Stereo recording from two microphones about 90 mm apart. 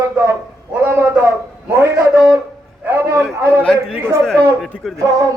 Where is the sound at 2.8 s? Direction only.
30° right (ahead or behind).